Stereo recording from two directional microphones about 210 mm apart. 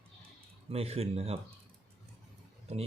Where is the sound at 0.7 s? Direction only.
30° right (ahead or behind).